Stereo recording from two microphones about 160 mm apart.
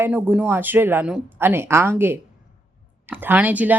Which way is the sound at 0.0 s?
10° right (ahead or behind).